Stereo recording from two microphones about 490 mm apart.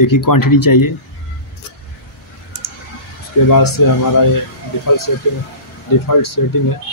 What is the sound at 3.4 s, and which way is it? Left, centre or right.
Speech, left.